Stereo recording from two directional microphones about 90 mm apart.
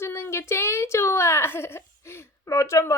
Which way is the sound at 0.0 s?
30° left (ahead or behind).